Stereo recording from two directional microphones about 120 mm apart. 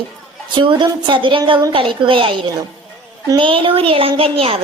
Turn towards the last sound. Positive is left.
turn(degrees=-50)  # may be behind; listen again after turning